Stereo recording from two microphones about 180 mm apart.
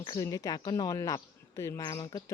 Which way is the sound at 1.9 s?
25° left (ahead or behind).